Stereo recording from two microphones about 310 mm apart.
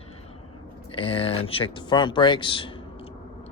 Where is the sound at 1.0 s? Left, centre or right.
Centre.